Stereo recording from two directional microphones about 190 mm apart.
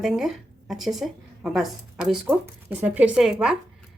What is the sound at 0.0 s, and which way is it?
A woman's voice, centre (ahead or behind).